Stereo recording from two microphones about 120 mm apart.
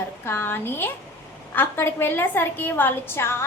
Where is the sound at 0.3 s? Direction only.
15° left (ahead or behind).